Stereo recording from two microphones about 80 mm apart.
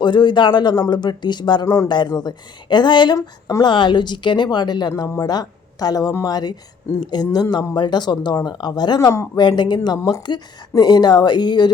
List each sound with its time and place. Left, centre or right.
0.0 s speech: left
1.6 s speech: left
1.9 s speech: left
3.2 s speech: left
3.6 s speech: left
9.0 s speech: left
10.0 s speech: left
10.2 s speech: left